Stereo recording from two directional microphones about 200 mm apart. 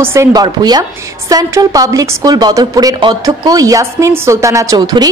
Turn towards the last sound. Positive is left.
turn(degrees=-20)  # may be behind; listen again after turning